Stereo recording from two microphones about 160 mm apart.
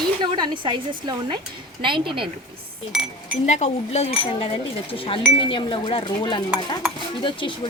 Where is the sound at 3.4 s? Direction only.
45° left (ahead or behind).